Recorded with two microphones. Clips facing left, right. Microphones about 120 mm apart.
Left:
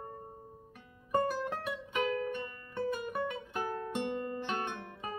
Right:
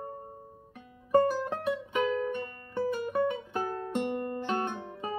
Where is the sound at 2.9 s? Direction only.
30° right (ahead or behind).